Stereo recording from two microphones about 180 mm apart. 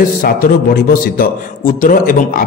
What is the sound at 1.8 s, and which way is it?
Speech, 50° left (ahead or behind).